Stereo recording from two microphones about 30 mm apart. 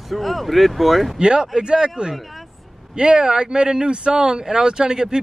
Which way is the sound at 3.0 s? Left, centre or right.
Right.